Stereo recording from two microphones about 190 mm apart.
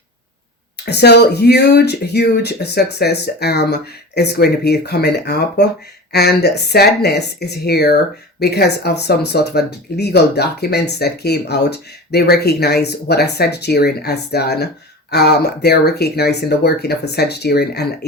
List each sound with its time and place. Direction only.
0.9 s speech: 60° left (ahead or behind)